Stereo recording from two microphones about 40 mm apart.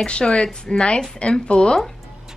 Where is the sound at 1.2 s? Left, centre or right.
Left.